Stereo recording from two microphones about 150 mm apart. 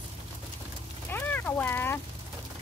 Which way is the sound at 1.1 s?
15° left (ahead or behind).